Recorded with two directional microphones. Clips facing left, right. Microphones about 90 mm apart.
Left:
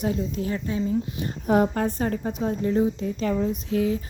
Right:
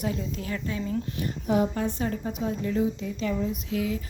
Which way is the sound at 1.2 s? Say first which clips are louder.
Left 4 dB; 50° left (ahead or behind).